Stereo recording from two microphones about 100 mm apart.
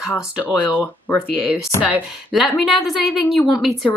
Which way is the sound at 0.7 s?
15° left (ahead or behind).